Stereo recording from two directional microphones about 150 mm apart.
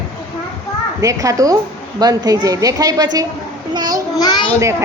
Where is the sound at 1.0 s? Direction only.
20° right (ahead or behind).